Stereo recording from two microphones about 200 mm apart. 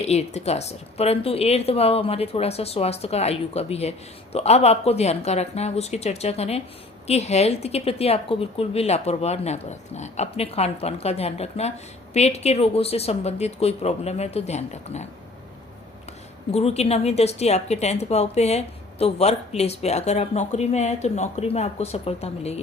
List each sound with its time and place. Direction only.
0.0 s a woman's voice: 35° left (ahead or behind)
16.5 s a woman's voice: 30° left (ahead or behind)